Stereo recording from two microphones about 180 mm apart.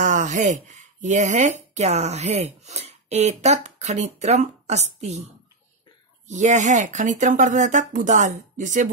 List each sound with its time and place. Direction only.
0.0 s speech: 45° right (ahead or behind)